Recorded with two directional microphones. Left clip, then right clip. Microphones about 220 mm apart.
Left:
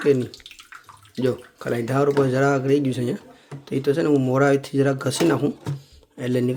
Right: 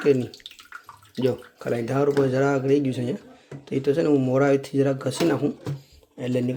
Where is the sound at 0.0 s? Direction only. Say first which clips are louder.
Left 1 dB; 5° left (ahead or behind).